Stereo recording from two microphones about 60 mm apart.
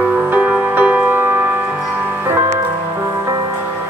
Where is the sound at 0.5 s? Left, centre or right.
Centre.